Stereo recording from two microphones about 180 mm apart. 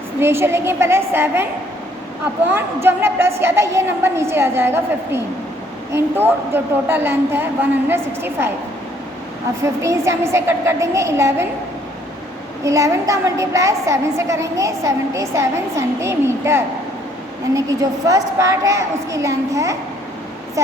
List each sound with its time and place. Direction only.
0.2 s a woman's voice: 15° right (ahead or behind)
2.5 s a woman's voice: 10° right (ahead or behind)
9.8 s a woman's voice: 15° right (ahead or behind)
12.6 s a woman's voice: 15° right (ahead or behind)